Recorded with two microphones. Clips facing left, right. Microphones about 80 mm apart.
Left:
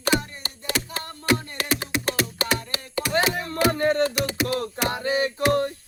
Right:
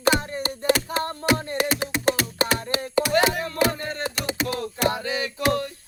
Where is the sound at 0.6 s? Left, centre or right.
Right.